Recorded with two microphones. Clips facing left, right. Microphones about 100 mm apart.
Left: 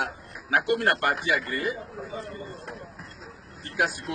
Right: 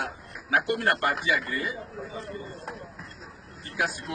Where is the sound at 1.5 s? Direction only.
55° left (ahead or behind).